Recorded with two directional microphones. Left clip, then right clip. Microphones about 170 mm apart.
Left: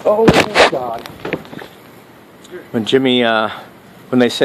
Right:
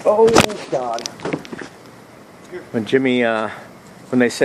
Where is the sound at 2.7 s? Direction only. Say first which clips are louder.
Left 4 dB; 50° left (ahead or behind).